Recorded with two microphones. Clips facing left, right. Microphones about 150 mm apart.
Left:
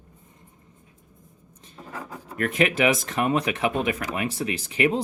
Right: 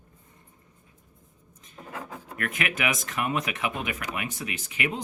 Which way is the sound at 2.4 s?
30° left (ahead or behind).